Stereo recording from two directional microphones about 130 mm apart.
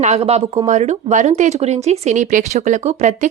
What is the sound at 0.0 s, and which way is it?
A woman's voice, 55° right (ahead or behind).